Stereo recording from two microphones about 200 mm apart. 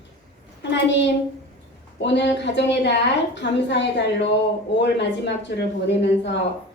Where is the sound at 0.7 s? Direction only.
60° left (ahead or behind).